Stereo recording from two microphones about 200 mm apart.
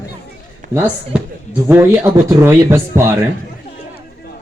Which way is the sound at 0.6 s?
40° right (ahead or behind).